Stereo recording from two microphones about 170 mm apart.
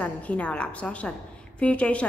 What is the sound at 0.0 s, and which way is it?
A woman's voice, 10° left (ahead or behind).